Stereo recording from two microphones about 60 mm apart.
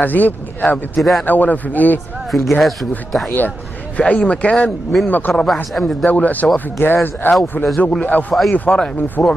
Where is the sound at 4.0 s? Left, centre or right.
Left.